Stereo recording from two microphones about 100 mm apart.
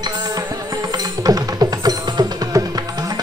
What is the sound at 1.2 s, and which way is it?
Music, 40° right (ahead or behind).